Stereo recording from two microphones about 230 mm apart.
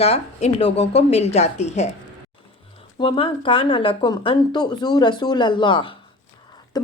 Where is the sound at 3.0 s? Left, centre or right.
Left.